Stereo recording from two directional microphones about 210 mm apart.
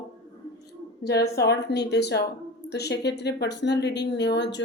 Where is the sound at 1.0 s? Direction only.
50° left (ahead or behind).